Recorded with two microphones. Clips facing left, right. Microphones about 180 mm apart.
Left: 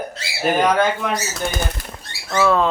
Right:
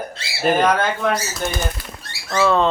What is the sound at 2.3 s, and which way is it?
Speech, 5° left (ahead or behind).